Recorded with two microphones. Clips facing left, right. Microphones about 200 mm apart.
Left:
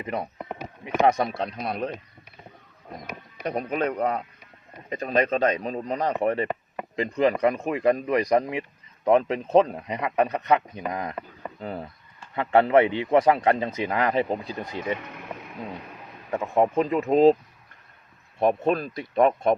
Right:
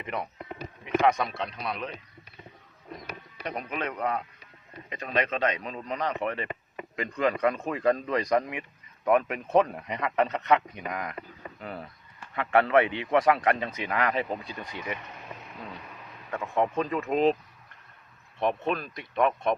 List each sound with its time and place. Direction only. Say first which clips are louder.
0.0 s speech: left 4 dB; 35° left (ahead or behind)
3.4 s a man's voice: left 7 dB; 40° left (ahead or behind)
14.9 s speech: left 5 dB; 60° left (ahead or behind)
16.3 s a man's voice: left 5 dB; 25° left (ahead or behind)
18.3 s speech: left 6 dB; 40° left (ahead or behind)